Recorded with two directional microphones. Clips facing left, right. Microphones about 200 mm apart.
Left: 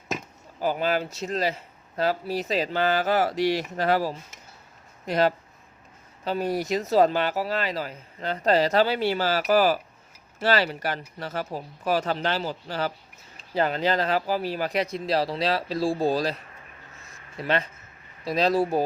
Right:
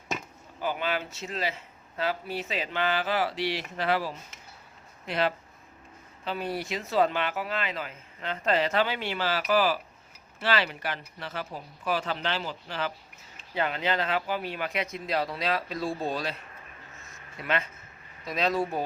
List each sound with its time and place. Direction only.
0.6 s speech: 40° left (ahead or behind)
17.1 s a sound: 35° left (ahead or behind)
18.3 s speech: 35° left (ahead or behind)